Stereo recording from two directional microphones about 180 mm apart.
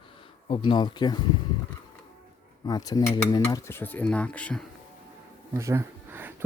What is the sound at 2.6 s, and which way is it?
Cutlery, 20° left (ahead or behind).